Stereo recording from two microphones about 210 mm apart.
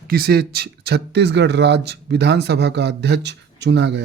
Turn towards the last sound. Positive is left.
turn(degrees=-55)  # may be behind; listen again after turning